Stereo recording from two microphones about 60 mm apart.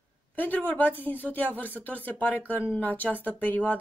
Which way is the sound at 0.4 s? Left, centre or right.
Left.